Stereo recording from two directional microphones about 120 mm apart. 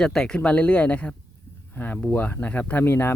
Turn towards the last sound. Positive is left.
turn(degrees=20)  # may be behind; listen again after turning